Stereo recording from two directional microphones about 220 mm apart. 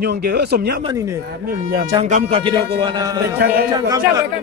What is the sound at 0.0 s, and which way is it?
Speech, 45° right (ahead or behind).